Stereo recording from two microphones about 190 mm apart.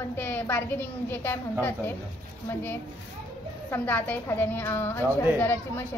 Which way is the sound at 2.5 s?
10° left (ahead or behind).